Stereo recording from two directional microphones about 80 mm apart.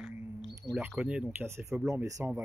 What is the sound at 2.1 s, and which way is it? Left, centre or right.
Speech, right.